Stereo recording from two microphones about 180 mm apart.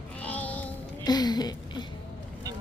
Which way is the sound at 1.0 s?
20° left (ahead or behind).